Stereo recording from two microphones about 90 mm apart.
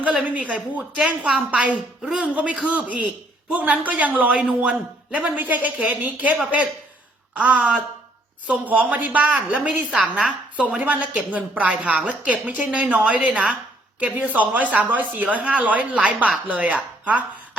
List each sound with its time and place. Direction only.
0.0 s a man's voice: 15° right (ahead or behind)